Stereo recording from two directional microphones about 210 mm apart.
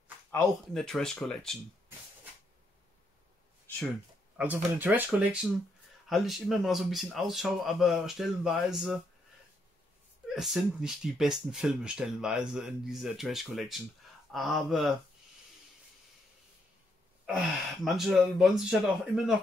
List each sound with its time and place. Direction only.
0.7 s speech: centre (ahead or behind)
4.4 s speech: 10° right (ahead or behind)
10.3 s speech: centre (ahead or behind)
17.3 s speech: centre (ahead or behind)